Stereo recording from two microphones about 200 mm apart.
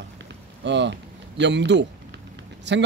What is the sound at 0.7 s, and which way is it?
A man's voice, 60° right (ahead or behind).